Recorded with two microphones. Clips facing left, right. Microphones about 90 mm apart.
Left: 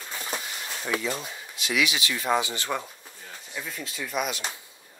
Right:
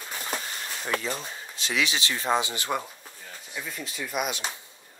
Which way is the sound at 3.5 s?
Centre (ahead or behind).